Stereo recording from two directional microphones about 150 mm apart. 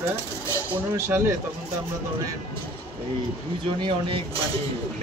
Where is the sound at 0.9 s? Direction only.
20° right (ahead or behind).